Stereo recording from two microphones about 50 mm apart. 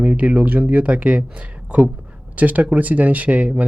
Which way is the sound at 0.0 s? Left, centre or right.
Right.